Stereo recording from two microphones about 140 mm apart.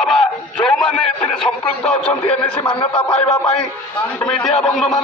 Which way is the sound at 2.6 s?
35° left (ahead or behind).